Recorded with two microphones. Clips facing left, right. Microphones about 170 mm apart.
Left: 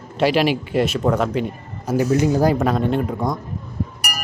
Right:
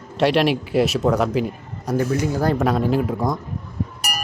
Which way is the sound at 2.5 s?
Centre (ahead or behind).